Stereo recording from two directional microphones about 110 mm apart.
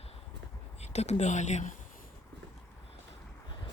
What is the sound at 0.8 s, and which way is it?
Speech, 80° left.